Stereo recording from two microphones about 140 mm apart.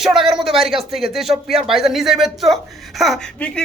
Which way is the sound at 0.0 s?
Centre (ahead or behind).